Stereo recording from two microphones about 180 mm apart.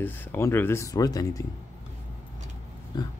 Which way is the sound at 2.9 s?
20° left (ahead or behind).